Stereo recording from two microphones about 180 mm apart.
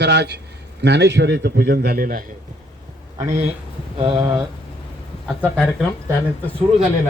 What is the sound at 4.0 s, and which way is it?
Speech, 25° right (ahead or behind).